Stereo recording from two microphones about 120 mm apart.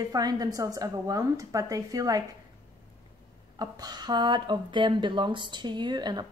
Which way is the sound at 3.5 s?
35° right (ahead or behind).